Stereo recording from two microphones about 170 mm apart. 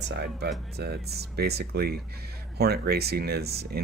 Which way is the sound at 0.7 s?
70° right (ahead or behind).